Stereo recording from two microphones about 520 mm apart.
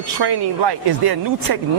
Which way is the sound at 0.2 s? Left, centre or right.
Right.